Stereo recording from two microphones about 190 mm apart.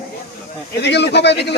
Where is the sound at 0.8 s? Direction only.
65° left (ahead or behind).